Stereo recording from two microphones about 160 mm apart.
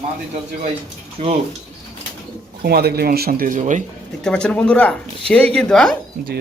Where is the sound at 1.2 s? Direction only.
45° right (ahead or behind).